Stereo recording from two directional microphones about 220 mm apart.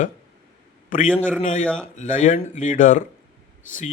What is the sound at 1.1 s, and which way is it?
Speech, 5° left (ahead or behind).